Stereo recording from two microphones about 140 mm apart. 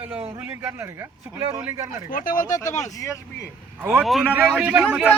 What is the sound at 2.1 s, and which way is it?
Speech, 85° left.